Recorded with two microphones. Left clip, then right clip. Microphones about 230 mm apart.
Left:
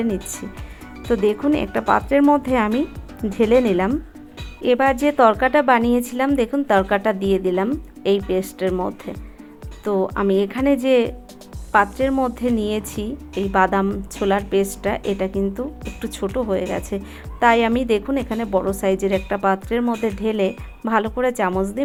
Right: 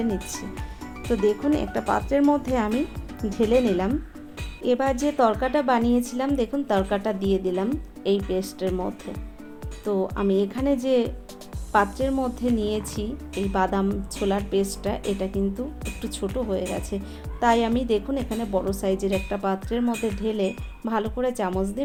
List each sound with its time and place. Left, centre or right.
1.1 s a woman's voice: left